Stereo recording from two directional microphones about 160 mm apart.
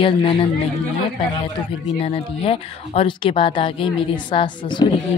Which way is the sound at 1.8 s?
35° left (ahead or behind).